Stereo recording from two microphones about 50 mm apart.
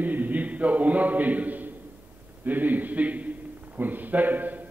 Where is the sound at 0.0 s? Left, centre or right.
Right.